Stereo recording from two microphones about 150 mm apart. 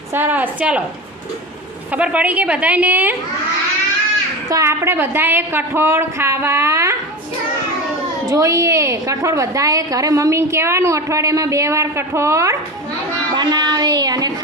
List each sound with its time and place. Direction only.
0.1 s a woman's voice: 15° right (ahead or behind)
1.9 s a woman's voice: 10° right (ahead or behind)
4.4 s a woman's voice: 20° right (ahead or behind)
8.3 s a woman's voice: 20° right (ahead or behind)
13.3 s a sound: 30° right (ahead or behind)